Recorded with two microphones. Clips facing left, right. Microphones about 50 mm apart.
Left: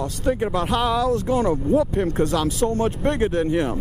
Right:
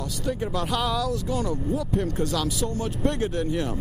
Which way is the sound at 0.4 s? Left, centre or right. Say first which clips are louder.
Left 5 dB; left.